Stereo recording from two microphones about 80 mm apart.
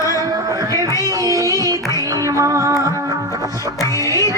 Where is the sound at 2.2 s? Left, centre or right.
Right.